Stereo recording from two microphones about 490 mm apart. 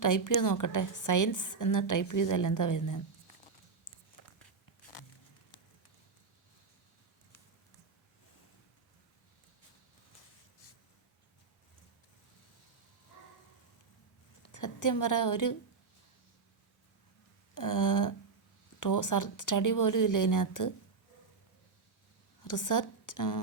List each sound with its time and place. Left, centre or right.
0.0 s a woman's voice: left
14.4 s a woman's voice: left
17.5 s a sound: left
18.8 s a woman's voice: left
22.4 s a woman's voice: left